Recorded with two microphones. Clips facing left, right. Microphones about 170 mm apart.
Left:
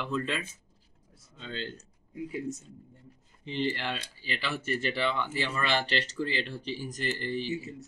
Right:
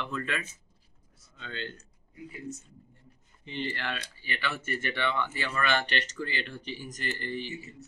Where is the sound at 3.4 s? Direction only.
90° left.